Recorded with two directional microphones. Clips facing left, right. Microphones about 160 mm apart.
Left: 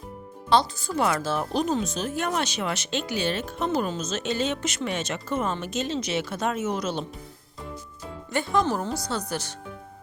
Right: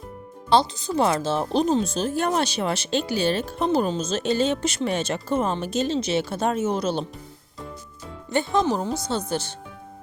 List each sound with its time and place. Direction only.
0.8 s speech: 25° right (ahead or behind)
8.3 s speech: 25° right (ahead or behind)